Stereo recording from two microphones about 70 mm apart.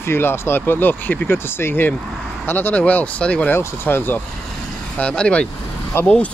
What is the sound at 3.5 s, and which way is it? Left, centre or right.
Speech, left.